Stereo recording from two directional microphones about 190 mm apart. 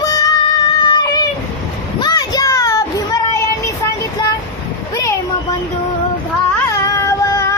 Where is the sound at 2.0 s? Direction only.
20° left (ahead or behind).